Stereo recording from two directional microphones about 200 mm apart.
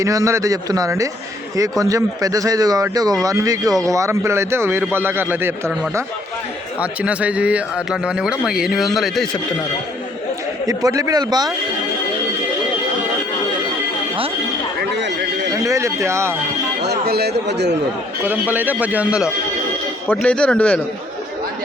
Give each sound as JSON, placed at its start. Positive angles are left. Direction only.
{"t": 0.0, "sound": "speech", "side_deg": -15}
{"t": 10.7, "sound": "a man's voice", "side_deg": -15}
{"t": 14.9, "sound": "a sound", "side_deg": -60}
{"t": 15.6, "sound": "speech", "side_deg": -15}
{"t": 16.8, "sound": "speech", "side_deg": -55}
{"t": 18.2, "sound": "speech", "side_deg": -10}
{"t": 20.1, "sound": "speech", "side_deg": 5}